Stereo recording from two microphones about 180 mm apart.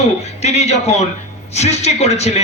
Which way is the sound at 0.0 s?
35° left (ahead or behind).